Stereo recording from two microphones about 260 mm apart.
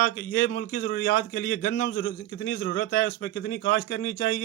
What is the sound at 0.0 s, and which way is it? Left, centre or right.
A man's voice, left.